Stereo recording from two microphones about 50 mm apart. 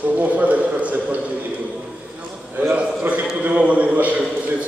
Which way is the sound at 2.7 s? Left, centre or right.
Right.